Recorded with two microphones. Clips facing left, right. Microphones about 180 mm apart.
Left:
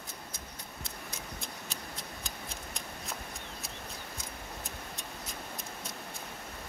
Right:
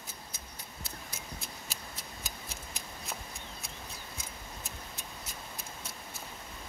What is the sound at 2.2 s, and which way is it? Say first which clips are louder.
Scissors: left 2 dB; 5° right (ahead or behind).